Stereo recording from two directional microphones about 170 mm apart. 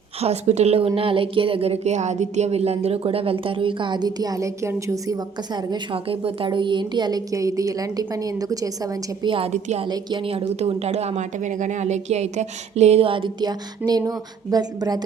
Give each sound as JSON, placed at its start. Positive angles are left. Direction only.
{"t": 0.2, "sound": "a woman's voice", "side_deg": -40}
{"t": 9.8, "sound": "a woman's voice", "side_deg": -25}